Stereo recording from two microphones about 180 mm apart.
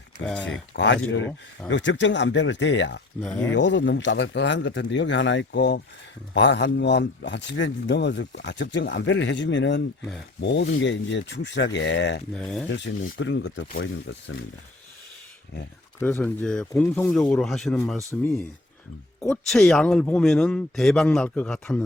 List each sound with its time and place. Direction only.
0.7 s speech: 90° left
3.2 s speech: 5° left (ahead or behind)
3.5 s a man's voice: 90° left
10.4 s speech: 75° left (ahead or behind)
12.3 s a man's voice: 5° left (ahead or behind)
12.7 s a man's voice: 75° left (ahead or behind)
13.1 s speech: 90° left
16.0 s a man's voice: 10° left (ahead or behind)
19.3 s a man's voice: centre (ahead or behind)